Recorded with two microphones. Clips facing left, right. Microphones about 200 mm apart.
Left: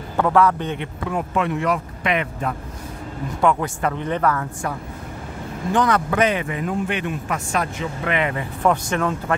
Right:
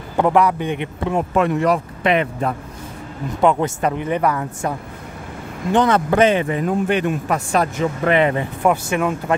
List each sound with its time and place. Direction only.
0.2 s a man's voice: 15° right (ahead or behind)
1.3 s speech: 45° right (ahead or behind)
3.3 s speech: 20° right (ahead or behind)
8.6 s a man's voice: 10° right (ahead or behind)